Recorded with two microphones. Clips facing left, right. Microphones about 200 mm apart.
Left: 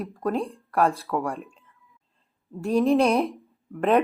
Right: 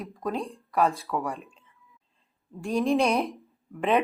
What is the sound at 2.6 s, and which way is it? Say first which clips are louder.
Speech: left 4 dB; 5° left (ahead or behind).